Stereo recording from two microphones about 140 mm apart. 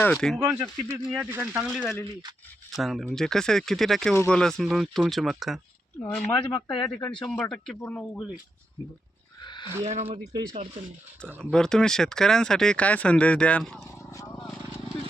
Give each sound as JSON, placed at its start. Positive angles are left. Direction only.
{"t": 0.0, "sound": "speech", "side_deg": 5}
{"t": 0.3, "sound": "speech", "side_deg": -20}
{"t": 1.0, "sound": "speech", "side_deg": -5}
{"t": 6.1, "sound": "speech", "side_deg": 10}
{"t": 6.5, "sound": "speech", "side_deg": 35}
{"t": 6.8, "sound": "speech", "side_deg": 10}
{"t": 9.4, "sound": "a sound", "side_deg": 35}
{"t": 9.8, "sound": "speech", "side_deg": -50}
{"t": 11.5, "sound": "speech", "side_deg": 5}
{"t": 14.1, "sound": "vehicle", "side_deg": 20}
{"t": 14.3, "sound": "speech", "side_deg": 5}